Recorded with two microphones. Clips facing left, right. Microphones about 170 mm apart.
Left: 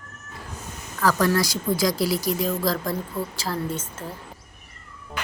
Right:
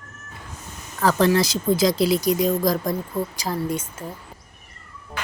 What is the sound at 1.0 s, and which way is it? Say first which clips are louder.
Speech: right 3 dB; 25° right (ahead or behind).